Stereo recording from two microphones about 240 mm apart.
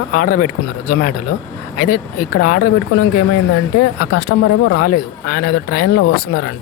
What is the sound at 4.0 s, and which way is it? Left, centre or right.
Speech, left.